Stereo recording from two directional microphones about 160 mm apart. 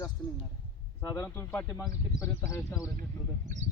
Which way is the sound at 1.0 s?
20° left (ahead or behind).